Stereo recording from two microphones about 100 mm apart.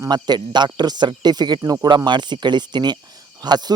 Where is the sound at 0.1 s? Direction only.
45° right (ahead or behind).